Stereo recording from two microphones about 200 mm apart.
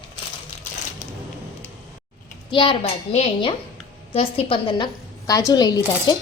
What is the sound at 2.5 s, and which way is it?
A woman's voice, 25° left (ahead or behind).